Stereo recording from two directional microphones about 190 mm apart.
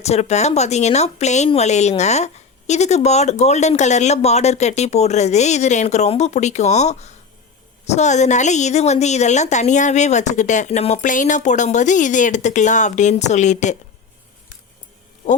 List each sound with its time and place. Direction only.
0.0 s speech: 35° left (ahead or behind)